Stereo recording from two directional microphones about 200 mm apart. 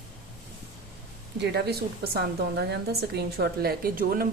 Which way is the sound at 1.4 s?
55° right (ahead or behind).